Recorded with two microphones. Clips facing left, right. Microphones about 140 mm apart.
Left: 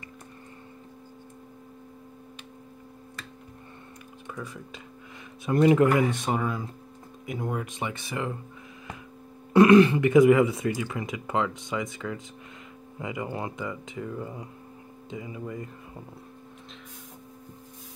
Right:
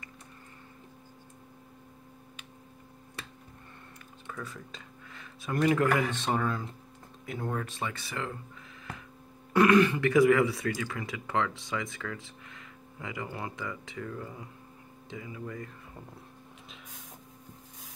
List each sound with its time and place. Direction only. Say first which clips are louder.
4.3 s speech: left 3 dB; 10° left (ahead or behind)
5.4 s speech: left 6 dB; 20° left (ahead or behind)
9.5 s a sound: left 6 dB; 20° left (ahead or behind)
9.9 s speech: left 5 dB; 20° left (ahead or behind)